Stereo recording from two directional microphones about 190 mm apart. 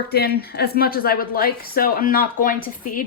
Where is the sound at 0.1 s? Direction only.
55° left (ahead or behind).